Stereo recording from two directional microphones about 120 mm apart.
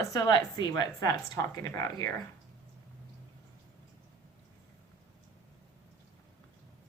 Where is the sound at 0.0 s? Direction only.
30° left (ahead or behind).